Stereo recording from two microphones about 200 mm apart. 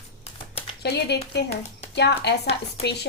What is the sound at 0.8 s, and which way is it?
Speech, 55° left (ahead or behind).